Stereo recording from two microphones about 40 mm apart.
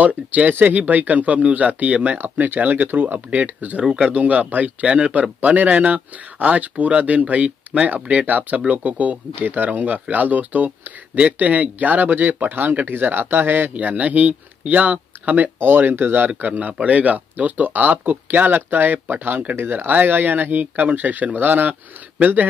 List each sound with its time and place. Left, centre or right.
0.0 s speech: right
3.8 s speech: centre
4.1 s speech: right
8.3 s speech: right
16.3 s speech: right